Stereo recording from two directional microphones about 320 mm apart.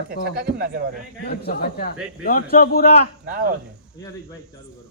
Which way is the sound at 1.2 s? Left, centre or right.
Left.